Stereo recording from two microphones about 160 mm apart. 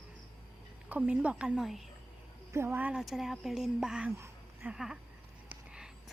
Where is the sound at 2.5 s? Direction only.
15° right (ahead or behind).